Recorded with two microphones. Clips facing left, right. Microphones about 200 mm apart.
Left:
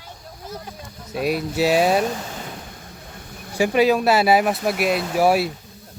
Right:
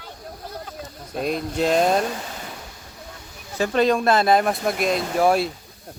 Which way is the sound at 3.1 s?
55° left (ahead or behind).